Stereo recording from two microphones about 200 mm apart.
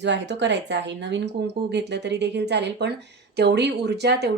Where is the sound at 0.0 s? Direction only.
60° right (ahead or behind).